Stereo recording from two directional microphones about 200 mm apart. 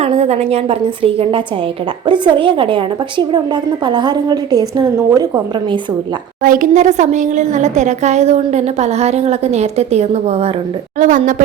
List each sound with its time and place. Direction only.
0.0 s a woman's voice: 30° right (ahead or behind)
6.4 s a woman's voice: 40° right (ahead or behind)